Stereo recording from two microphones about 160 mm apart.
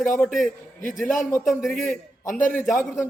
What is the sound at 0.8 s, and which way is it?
Speech, 55° left (ahead or behind).